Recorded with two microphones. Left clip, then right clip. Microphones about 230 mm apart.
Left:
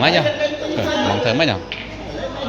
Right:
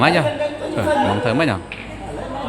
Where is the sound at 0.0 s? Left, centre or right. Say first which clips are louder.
Even; centre.